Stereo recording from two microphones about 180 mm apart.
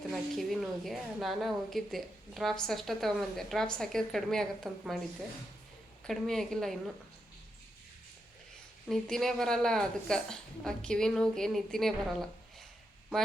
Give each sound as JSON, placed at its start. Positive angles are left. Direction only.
{"t": 0.1, "sound": "a woman's voice", "side_deg": 0}
{"t": 6.1, "sound": "a woman's voice", "side_deg": 0}
{"t": 8.9, "sound": "a woman's voice", "side_deg": 0}